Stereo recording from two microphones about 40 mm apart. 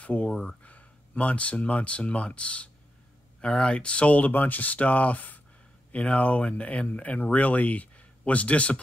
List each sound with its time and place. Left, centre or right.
0.0 s speech: left
4.2 s speech: left
5.9 s speech: left